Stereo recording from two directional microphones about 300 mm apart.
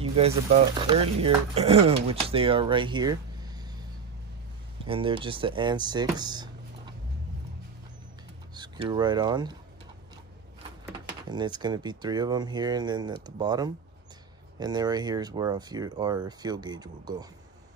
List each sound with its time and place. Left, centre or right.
0.0 s a sound: centre
0.7 s speech: centre
4.8 s speech: centre
8.5 s speech: centre
11.2 s speech: centre